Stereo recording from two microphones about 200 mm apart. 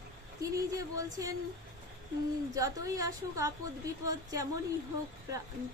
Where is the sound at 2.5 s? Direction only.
15° right (ahead or behind).